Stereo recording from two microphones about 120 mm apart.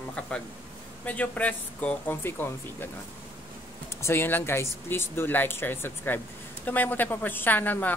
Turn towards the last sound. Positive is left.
turn(degrees=15)  # may be behind; listen again after turning